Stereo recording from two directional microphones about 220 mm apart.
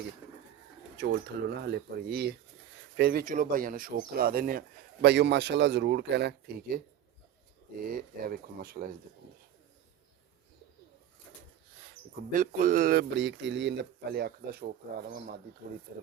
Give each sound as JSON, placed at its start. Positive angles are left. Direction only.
{"t": 0.9, "sound": "speech", "side_deg": -50}
{"t": 7.9, "sound": "speech", "side_deg": -40}
{"t": 12.3, "sound": "speech", "side_deg": -35}